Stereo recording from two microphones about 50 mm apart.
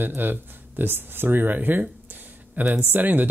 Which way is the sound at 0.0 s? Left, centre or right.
Right.